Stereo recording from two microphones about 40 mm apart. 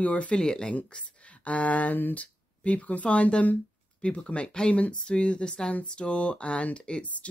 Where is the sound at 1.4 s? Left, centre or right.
Left.